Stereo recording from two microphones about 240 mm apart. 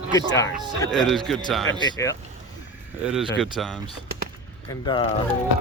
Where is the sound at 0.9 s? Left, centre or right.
Centre.